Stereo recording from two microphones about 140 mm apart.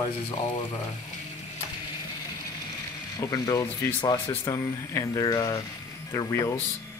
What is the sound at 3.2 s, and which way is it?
Speech, 25° left (ahead or behind).